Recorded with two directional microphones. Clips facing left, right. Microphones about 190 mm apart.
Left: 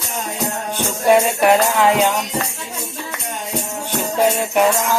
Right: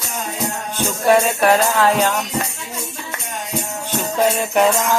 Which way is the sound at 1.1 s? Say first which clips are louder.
Left 1 dB; 15° left (ahead or behind).